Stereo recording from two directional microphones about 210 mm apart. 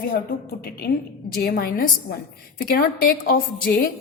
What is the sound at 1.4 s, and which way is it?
A woman's voice, 45° left (ahead or behind).